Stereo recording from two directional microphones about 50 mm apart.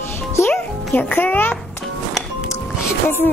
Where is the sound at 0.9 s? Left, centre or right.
Left.